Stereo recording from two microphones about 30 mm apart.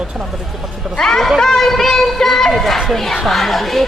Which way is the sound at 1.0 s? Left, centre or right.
Centre.